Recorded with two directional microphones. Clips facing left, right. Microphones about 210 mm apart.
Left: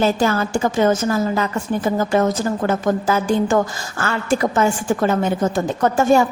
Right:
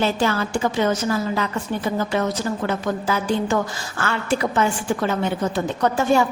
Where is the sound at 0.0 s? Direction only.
45° left (ahead or behind).